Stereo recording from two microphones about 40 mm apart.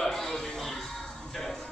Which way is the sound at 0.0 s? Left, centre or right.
Centre.